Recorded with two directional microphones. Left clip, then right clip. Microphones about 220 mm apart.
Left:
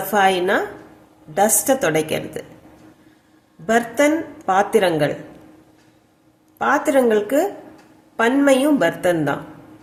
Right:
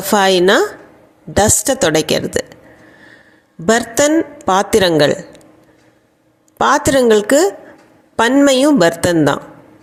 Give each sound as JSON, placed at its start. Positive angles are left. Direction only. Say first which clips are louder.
{"t": 0.1, "sound": "a woman's voice", "louder": "right 6 dB", "side_deg": -40}
{"t": 3.7, "sound": "a woman's voice", "louder": "right 4 dB", "side_deg": -40}
{"t": 6.6, "sound": "a woman's voice", "louder": "right 5 dB", "side_deg": -40}